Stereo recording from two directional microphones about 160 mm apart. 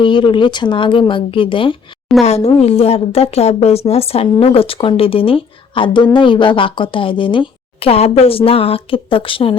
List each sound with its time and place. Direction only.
0.0 s a woman's voice: 30° left (ahead or behind)